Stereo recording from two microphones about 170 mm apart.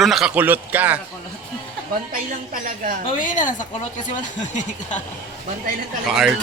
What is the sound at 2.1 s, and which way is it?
Speech, 55° right (ahead or behind).